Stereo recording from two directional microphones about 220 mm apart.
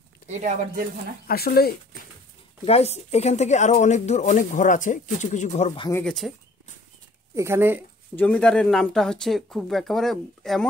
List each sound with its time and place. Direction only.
0.3 s speech: 35° right (ahead or behind)
1.2 s speech: 45° left (ahead or behind)
2.6 s speech: 30° left (ahead or behind)
5.8 s speech: 15° left (ahead or behind)
6.0 s speech: centre (ahead or behind)
7.3 s speech: 10° right (ahead or behind)
8.2 s speech: 5° left (ahead or behind)